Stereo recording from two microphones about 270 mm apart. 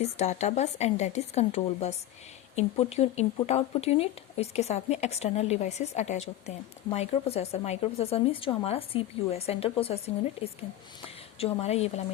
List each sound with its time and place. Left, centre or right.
0.0 s a woman's voice: left